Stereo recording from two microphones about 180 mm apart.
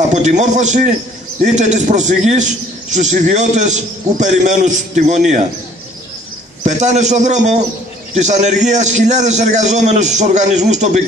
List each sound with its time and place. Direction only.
0.1 s a man's voice: 40° right (ahead or behind)
6.6 s a man's voice: 40° right (ahead or behind)